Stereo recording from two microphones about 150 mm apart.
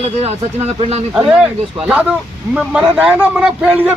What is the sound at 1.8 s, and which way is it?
A man's voice, 5° right (ahead or behind).